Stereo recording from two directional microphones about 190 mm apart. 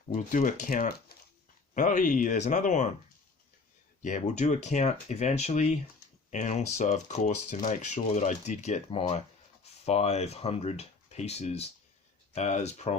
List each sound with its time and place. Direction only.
0.1 s speech: 40° left (ahead or behind)
1.7 s speech: 40° left (ahead or behind)
4.0 s speech: 40° left (ahead or behind)